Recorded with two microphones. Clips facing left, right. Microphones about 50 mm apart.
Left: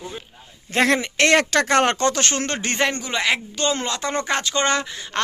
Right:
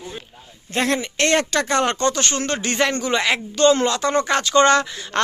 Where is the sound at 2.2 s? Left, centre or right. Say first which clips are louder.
Right 1 dB; left.